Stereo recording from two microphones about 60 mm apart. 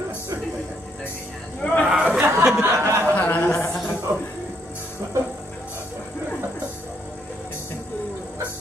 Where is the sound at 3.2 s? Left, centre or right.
Left.